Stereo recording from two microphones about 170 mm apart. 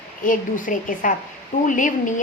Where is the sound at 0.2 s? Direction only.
50° left (ahead or behind).